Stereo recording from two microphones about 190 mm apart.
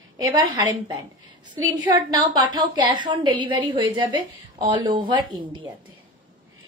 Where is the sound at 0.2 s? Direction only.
20° right (ahead or behind).